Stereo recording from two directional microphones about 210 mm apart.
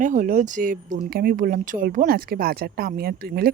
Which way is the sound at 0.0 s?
40° right (ahead or behind).